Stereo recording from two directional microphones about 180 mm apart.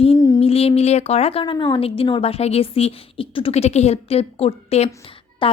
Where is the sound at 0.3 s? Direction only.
35° left (ahead or behind).